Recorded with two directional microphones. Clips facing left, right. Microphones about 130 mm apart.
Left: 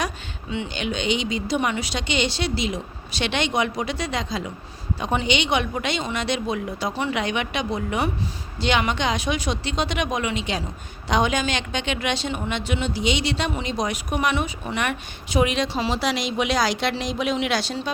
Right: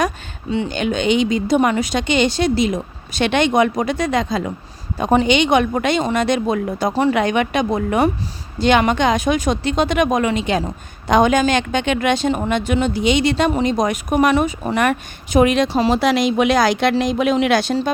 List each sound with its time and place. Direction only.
0.5 s a woman's voice: 40° right (ahead or behind)